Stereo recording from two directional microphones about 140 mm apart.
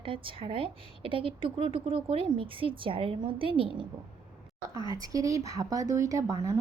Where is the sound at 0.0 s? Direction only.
40° right (ahead or behind).